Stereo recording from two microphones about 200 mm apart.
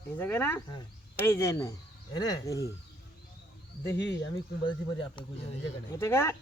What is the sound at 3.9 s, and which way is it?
Speech, 60° left (ahead or behind).